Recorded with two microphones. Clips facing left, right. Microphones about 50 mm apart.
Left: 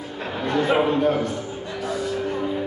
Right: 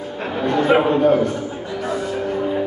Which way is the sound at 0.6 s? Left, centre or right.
Right.